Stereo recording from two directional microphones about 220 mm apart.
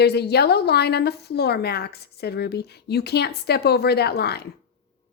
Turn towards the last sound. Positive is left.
turn(degrees=45)  # may be behind; listen again after turning